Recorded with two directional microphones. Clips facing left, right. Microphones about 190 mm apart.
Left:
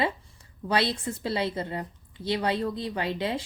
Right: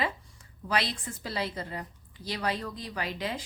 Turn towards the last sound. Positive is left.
turn(degrees=25)  # may be behind; listen again after turning